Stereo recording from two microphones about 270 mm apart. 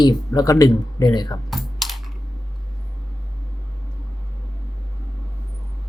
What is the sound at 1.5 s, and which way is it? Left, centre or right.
Computer keyboard, centre.